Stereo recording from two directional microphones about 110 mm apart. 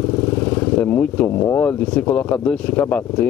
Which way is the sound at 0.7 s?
15° left (ahead or behind).